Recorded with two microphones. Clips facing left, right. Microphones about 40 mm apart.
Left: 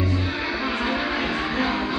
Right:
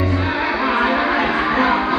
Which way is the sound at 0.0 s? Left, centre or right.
Right.